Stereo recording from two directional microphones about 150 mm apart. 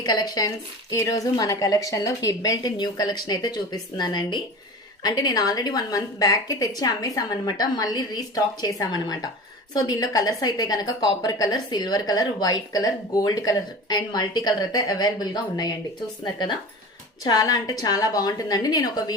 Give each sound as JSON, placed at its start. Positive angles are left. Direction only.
{"t": 0.0, "sound": "a woman's voice", "side_deg": 25}